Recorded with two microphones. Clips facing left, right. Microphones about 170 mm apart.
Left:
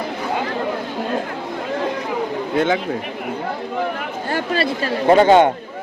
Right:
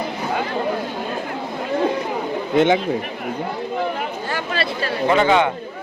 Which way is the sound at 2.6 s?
20° right (ahead or behind).